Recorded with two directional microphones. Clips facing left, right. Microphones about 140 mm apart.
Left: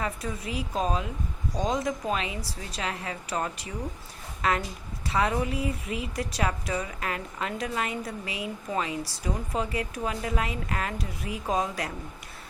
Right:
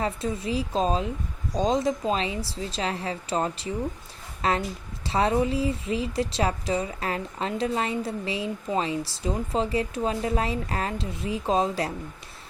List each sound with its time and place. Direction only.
0.0 s a woman's voice: 25° right (ahead or behind)